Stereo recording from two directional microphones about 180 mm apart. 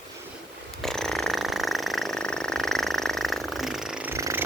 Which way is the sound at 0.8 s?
Centre (ahead or behind).